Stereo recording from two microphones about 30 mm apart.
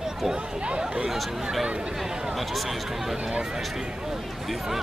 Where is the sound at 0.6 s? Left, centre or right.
Right.